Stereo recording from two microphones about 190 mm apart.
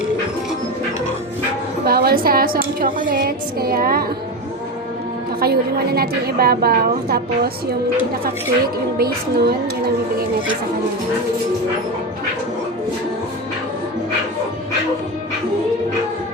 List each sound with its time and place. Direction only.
1.8 s a woman's voice: 55° right (ahead or behind)
5.4 s a woman's voice: 55° right (ahead or behind)